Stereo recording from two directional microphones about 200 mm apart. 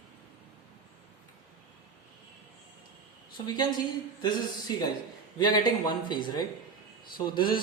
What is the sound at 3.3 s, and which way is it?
Speech, 20° left (ahead or behind).